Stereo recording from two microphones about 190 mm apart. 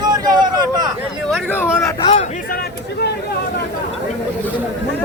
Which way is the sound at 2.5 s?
55° left (ahead or behind).